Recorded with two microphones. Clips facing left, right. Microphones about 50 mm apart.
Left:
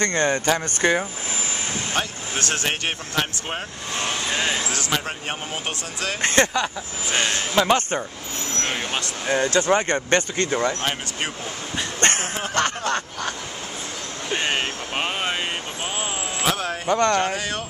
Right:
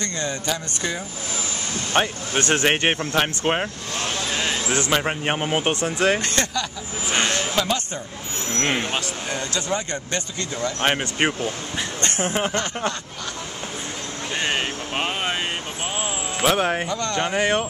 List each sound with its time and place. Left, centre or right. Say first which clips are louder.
0.0 s speech: left 6 dB; left
2.0 s speech: right 7 dB; right
3.9 s vehicle: left 3 dB; centre
4.7 s speech: right 4 dB; right
6.2 s speech: left 5 dB; left
9.3 s speech: left 8 dB; left
10.8 s speech: right 5 dB; right
12.0 s a sound: left 4 dB; left
12.3 s speech: right 5 dB; right
12.5 s speech: left 3 dB; left
14.3 s speech: left 1 dB; centre
16.4 s speech: right 5 dB; right
16.8 s speech: left 6 dB; left
17.2 s speech: right 4 dB; right